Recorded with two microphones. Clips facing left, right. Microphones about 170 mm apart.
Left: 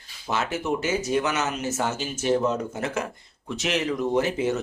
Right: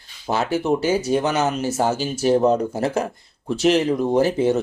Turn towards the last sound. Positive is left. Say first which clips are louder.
# right 6 dB
turn(degrees=-30)  # may be behind; listen again after turning